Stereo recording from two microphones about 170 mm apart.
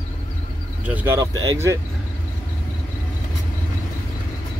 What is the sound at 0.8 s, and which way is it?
Speech, 10° right (ahead or behind).